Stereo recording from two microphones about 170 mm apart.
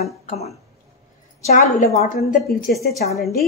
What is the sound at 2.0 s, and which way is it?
A woman's voice, 65° left (ahead or behind).